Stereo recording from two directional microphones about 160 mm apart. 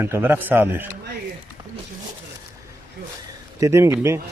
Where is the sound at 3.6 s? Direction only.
15° right (ahead or behind).